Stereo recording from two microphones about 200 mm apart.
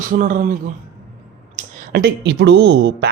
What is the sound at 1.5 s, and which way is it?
Speech, 55° right (ahead or behind).